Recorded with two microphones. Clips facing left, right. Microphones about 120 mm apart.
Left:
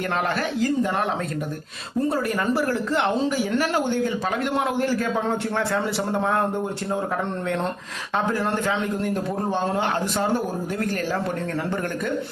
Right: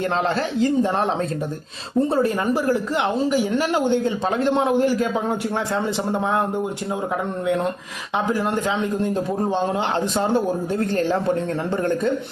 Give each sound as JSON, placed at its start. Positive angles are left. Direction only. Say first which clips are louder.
{"t": 0.3, "sound": "a man's voice", "louder": "right 3 dB", "side_deg": -25}
{"t": 2.0, "sound": "a man's voice", "louder": "right 4 dB", "side_deg": -25}
{"t": 2.5, "sound": "a man's voice", "louder": "right 2 dB", "side_deg": -15}
{"t": 8.3, "sound": "a man's voice", "louder": "right 3 dB", "side_deg": -15}